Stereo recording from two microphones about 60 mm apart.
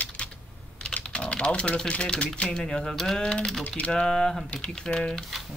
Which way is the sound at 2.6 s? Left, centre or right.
Centre.